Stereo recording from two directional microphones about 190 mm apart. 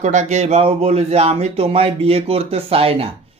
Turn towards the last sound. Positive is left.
turn(degrees=-30)  # may be behind; listen again after turning